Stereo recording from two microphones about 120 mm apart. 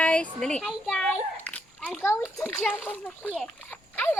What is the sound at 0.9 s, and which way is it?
Children playing, 10° left (ahead or behind).